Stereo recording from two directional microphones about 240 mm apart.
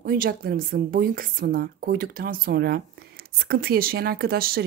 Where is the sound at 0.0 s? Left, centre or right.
Right.